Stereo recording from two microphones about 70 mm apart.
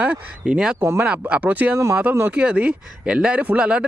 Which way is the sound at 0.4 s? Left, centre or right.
Centre.